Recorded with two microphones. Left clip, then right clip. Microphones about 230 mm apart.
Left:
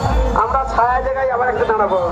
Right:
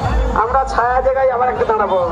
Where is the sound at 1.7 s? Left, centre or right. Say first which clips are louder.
Right 1 dB; right.